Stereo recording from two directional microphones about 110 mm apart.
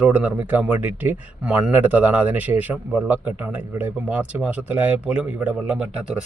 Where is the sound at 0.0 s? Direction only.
15° right (ahead or behind).